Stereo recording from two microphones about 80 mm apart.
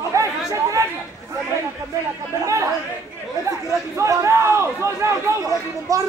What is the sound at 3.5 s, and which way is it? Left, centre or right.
A man's voice, right.